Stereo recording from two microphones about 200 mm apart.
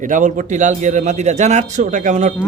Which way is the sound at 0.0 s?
40° right (ahead or behind).